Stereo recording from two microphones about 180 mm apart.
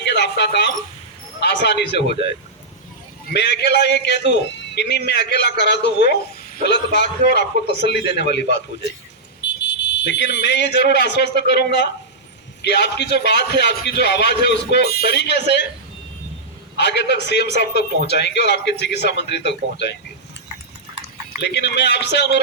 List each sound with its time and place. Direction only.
0.0 s a sound: 70° left (ahead or behind)
1.4 s a man's voice: 70° left (ahead or behind)
3.3 s a man's voice: 70° left (ahead or behind)
16.7 s a man's voice: 70° left (ahead or behind)
21.5 s a man's voice: 70° left (ahead or behind)